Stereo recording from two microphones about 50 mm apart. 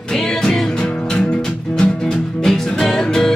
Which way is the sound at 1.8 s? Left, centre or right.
Centre.